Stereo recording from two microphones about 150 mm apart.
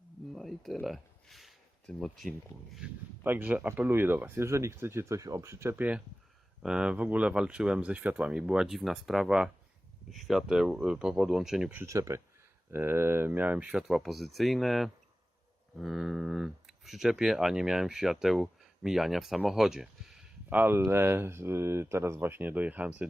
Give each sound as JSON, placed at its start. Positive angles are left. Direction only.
{"t": 0.3, "sound": "speech", "side_deg": 0}
{"t": 2.7, "sound": "speech", "side_deg": -10}
{"t": 11.8, "sound": "speech", "side_deg": -20}